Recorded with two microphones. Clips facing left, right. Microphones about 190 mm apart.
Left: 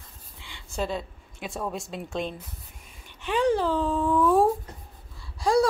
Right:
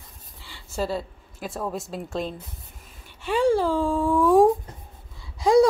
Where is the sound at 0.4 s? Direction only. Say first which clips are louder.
Right 2 dB; 5° right (ahead or behind).